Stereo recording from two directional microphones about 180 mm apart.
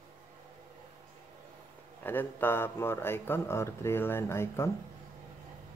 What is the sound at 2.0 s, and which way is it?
Speech, 10° left (ahead or behind).